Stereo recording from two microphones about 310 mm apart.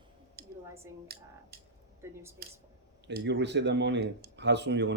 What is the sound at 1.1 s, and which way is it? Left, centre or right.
Speech, right.